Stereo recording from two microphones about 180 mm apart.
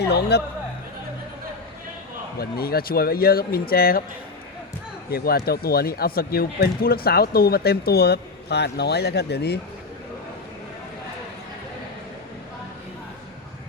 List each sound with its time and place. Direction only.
0.0 s speech: 65° left (ahead or behind)
2.4 s speech: 60° left (ahead or behind)
5.1 s speech: 60° left (ahead or behind)